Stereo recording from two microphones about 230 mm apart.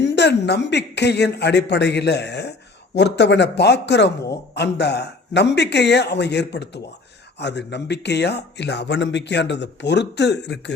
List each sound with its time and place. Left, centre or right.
0.0 s speech: left